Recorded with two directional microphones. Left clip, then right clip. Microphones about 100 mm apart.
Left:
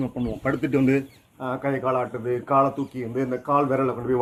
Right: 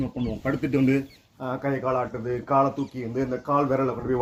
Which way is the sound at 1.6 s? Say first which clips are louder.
Left 1 dB; 10° left (ahead or behind).